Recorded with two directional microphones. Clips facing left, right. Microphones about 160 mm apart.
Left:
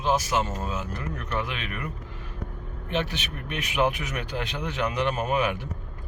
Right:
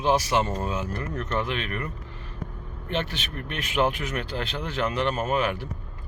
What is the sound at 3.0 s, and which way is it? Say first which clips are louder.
Speech: even; 10° left (ahead or behind).